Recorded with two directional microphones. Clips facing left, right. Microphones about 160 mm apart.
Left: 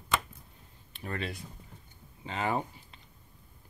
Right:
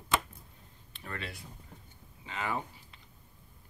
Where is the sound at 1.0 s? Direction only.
20° left (ahead or behind).